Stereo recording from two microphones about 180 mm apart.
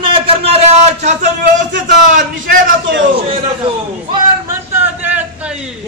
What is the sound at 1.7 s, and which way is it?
Speech, 45° right (ahead or behind).